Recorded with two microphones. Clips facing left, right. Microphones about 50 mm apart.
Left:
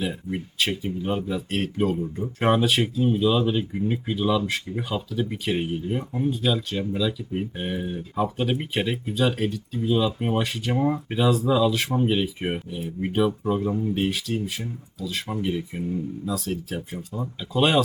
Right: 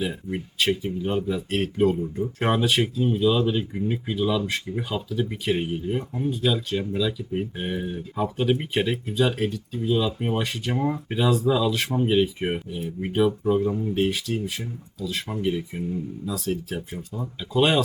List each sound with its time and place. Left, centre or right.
0.0 s speech: centre